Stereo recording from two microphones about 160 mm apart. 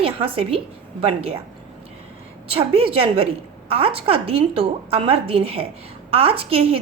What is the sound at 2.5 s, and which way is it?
A woman's voice, 35° right (ahead or behind).